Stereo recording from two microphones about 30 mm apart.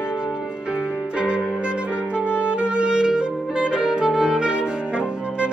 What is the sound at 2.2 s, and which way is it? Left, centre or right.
Saxophone, right.